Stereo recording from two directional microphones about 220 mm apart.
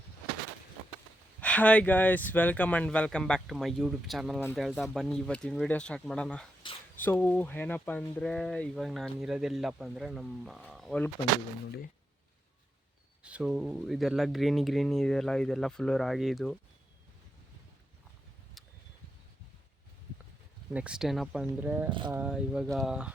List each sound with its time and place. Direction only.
1.4 s speech: 5° left (ahead or behind)
13.2 s speech: 5° right (ahead or behind)
18.6 s a sound: centre (ahead or behind)
20.7 s speech: 5° right (ahead or behind)
21.8 s speech: 20° right (ahead or behind)
22.1 s speech: 5° right (ahead or behind)